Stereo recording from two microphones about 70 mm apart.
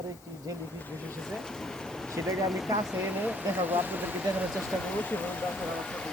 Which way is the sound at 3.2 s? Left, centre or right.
Right.